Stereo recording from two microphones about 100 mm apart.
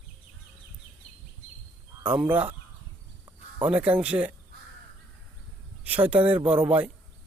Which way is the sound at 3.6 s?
15° right (ahead or behind).